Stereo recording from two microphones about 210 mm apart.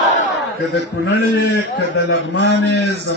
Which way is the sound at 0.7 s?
55° left (ahead or behind).